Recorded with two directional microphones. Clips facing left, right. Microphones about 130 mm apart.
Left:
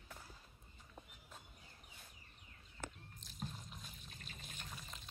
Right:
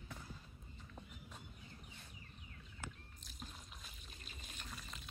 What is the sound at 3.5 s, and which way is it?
Water, centre (ahead or behind).